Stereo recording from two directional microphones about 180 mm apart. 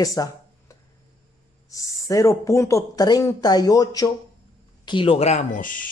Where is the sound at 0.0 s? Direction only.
20° left (ahead or behind).